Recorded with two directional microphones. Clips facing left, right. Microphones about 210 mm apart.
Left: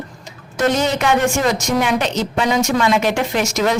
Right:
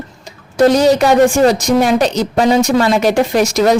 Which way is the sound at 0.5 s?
35° right (ahead or behind).